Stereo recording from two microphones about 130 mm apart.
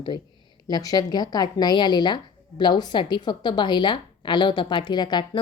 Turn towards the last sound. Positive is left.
turn(degrees=35)  # may be behind; listen again after turning